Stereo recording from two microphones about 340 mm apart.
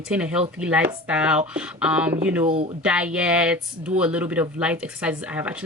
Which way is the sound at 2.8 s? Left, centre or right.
Centre.